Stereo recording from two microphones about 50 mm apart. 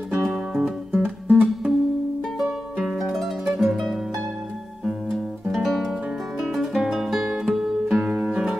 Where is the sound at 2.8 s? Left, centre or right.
Centre.